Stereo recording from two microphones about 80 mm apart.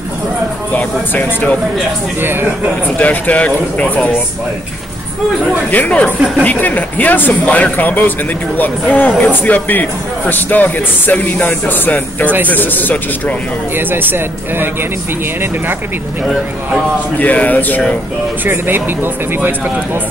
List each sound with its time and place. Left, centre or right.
0.7 s speech: centre
2.2 s speech: right
3.0 s speech: centre
5.7 s speech: centre
13.7 s speech: right
17.2 s speech: centre
18.4 s speech: right